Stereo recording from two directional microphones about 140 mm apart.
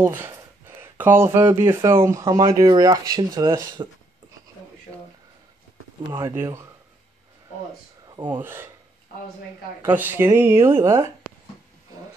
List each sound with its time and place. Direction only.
0.0 s speech: 15° right (ahead or behind)
6.2 s speech: 20° right (ahead or behind)
8.4 s speech: 15° right (ahead or behind)
9.8 s speech: 15° right (ahead or behind)